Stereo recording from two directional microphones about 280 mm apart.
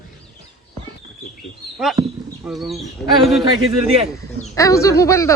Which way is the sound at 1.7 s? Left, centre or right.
Centre.